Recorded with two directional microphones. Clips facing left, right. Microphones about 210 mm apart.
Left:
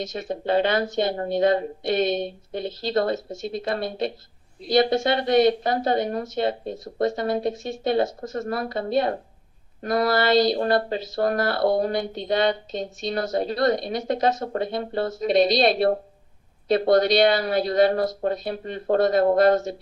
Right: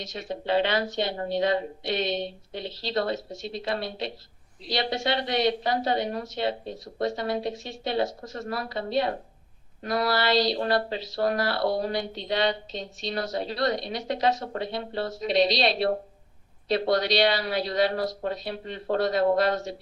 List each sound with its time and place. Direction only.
0.0 s speech: 50° left (ahead or behind)